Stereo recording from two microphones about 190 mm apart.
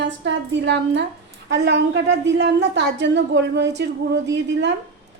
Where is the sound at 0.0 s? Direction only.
70° right (ahead or behind).